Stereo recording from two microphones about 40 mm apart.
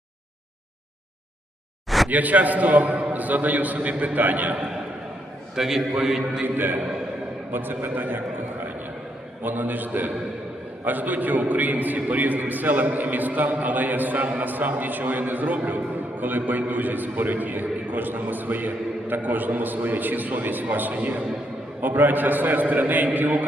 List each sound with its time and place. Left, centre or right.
2.0 s a man's voice: right
5.5 s a man's voice: centre
6.4 s a man's voice: right
9.4 s a man's voice: right